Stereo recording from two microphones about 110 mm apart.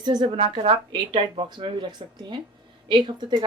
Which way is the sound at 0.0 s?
40° right (ahead or behind).